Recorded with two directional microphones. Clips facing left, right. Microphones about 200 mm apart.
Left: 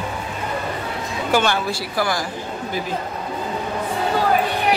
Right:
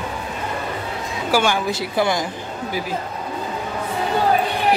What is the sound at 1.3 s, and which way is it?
Speech, 10° right (ahead or behind).